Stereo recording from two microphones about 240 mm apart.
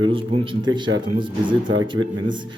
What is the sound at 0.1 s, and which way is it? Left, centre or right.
A man's voice, right.